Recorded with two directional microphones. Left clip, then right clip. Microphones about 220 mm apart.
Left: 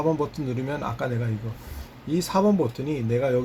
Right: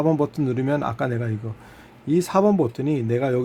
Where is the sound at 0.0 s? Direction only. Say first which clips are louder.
Right 4 dB; 45° right (ahead or behind).